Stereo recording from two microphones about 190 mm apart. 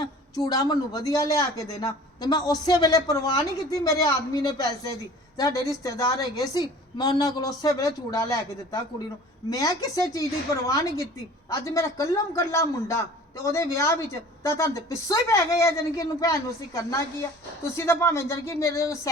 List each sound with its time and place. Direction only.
0.0 s a woman's voice: 20° left (ahead or behind)